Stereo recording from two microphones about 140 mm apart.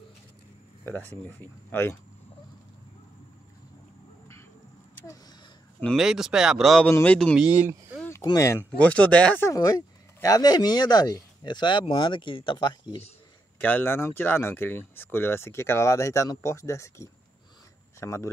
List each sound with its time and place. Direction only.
0.8 s speech: 15° left (ahead or behind)
5.9 s speech: 5° right (ahead or behind)
6.9 s speech: 10° left (ahead or behind)
7.3 s speech: 10° right (ahead or behind)
8.1 s speech: 25° left (ahead or behind)
13.6 s speech: 15° left (ahead or behind)